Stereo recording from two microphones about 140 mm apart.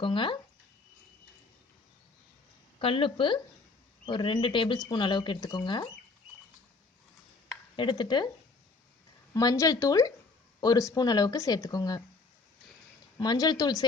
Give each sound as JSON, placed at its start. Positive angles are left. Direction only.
{"t": 0.0, "sound": "speech", "side_deg": 35}
{"t": 2.7, "sound": "speech", "side_deg": 40}
{"t": 7.8, "sound": "speech", "side_deg": 35}
{"t": 9.3, "sound": "speech", "side_deg": 25}
{"t": 13.1, "sound": "speech", "side_deg": 30}